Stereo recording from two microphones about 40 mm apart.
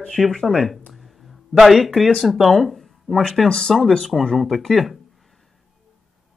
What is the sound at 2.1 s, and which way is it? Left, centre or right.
Speech, centre.